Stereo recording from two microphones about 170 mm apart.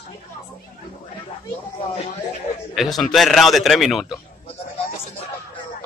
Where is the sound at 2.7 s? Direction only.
Centre (ahead or behind).